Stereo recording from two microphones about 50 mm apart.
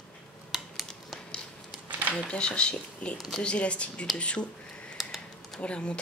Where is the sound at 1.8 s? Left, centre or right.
Right.